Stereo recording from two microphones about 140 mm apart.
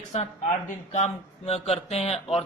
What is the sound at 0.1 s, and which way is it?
A man's voice, 50° left (ahead or behind).